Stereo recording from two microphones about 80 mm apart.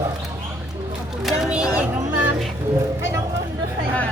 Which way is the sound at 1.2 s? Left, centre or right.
Centre.